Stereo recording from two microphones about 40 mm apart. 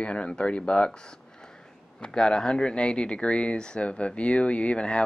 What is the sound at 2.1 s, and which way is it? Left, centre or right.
Speech, centre.